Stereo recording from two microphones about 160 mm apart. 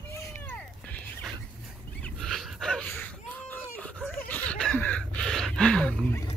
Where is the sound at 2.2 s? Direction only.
5° left (ahead or behind).